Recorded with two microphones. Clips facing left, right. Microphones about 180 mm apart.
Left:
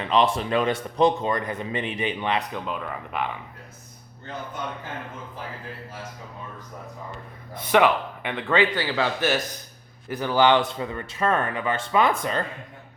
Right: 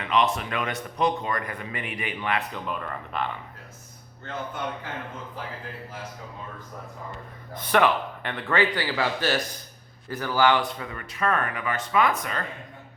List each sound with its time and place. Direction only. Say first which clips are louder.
0.0 s a man's voice: left 3 dB; 30° left (ahead or behind)
2.7 s speech: left 1 dB; 5° left (ahead or behind)
7.5 s a man's voice: left 2 dB; 10° left (ahead or behind); by 12.4 s 30° left (ahead or behind)